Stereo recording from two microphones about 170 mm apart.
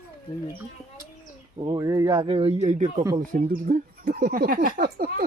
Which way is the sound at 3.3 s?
55° right (ahead or behind).